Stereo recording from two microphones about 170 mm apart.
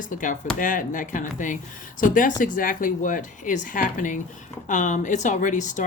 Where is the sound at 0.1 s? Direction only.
50° left (ahead or behind).